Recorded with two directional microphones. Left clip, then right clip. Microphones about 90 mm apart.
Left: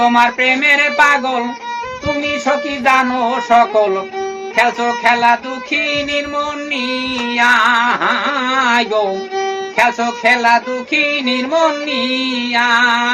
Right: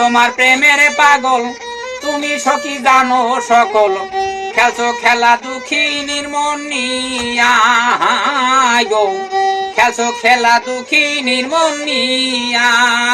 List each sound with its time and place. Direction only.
0.0 s music: centre (ahead or behind)
9.3 s music: 20° right (ahead or behind)
9.7 s music: centre (ahead or behind)